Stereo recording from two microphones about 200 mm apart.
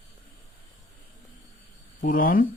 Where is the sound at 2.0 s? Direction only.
45° left (ahead or behind).